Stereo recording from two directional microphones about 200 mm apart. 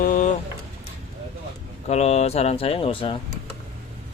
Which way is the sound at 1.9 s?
30° left (ahead or behind).